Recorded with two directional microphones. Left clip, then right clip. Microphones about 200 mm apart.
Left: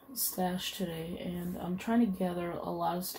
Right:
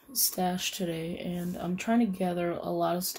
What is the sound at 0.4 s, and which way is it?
Speech, 55° right (ahead or behind).